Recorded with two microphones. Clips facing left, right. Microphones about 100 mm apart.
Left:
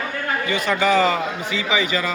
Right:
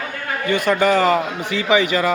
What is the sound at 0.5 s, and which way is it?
A man's voice, 55° right (ahead or behind).